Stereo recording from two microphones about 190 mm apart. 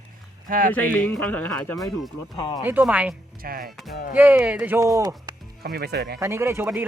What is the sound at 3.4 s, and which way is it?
Speech, 50° right (ahead or behind).